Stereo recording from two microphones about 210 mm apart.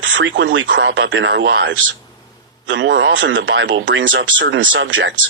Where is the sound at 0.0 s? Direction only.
60° right (ahead or behind).